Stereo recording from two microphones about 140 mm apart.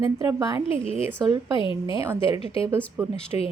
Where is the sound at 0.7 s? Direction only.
45° left (ahead or behind).